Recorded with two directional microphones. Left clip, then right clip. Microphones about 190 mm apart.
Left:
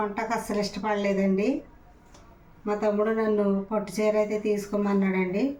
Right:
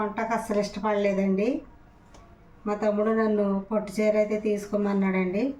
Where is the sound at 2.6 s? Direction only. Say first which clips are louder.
Even; 5° right (ahead or behind).